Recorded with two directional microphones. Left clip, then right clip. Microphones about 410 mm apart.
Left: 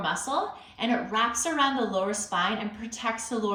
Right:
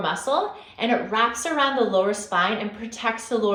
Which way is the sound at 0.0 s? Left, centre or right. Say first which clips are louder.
Right 5 dB; centre.